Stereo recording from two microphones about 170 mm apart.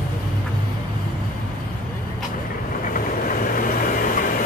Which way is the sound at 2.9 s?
55° left (ahead or behind).